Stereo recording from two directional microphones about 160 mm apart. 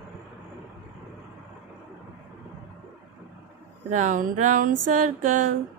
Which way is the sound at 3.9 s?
50° right (ahead or behind).